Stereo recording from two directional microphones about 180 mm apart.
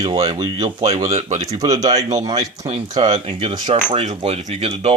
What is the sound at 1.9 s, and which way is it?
Speech, 40° right (ahead or behind).